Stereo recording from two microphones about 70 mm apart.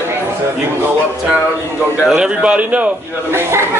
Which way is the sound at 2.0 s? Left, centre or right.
Centre.